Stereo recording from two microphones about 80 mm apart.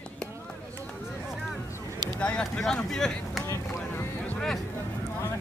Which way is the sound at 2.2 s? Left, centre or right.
Centre.